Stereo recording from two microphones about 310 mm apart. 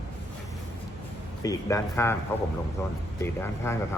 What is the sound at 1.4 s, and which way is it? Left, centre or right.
Speech, centre.